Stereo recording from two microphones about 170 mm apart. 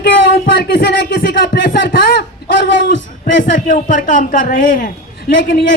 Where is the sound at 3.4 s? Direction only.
50° left (ahead or behind).